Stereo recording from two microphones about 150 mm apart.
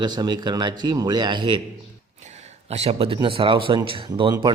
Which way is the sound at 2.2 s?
50° right (ahead or behind).